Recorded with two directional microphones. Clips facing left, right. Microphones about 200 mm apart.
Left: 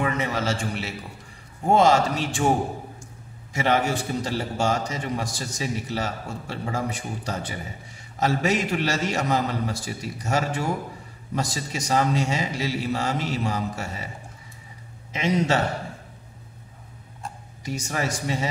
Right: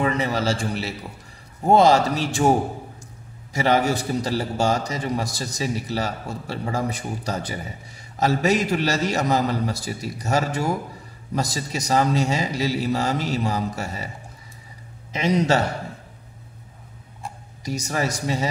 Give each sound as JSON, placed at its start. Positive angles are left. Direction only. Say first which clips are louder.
{"t": 0.0, "sound": "a man's voice", "louder": "right 3 dB", "side_deg": -35}
{"t": 3.5, "sound": "a man's voice", "louder": "right 3 dB", "side_deg": -35}
{"t": 15.1, "sound": "a man's voice", "louder": "right 2 dB", "side_deg": -35}
{"t": 17.6, "sound": "a man's voice", "louder": "right 3 dB", "side_deg": -40}